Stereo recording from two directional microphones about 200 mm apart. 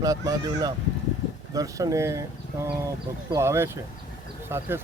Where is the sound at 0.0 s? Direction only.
15° right (ahead or behind).